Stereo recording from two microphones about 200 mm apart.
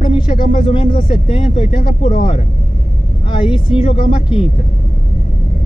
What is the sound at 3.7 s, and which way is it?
Speech, 25° left (ahead or behind).